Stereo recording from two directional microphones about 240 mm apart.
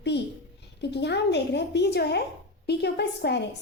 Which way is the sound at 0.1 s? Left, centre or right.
Left.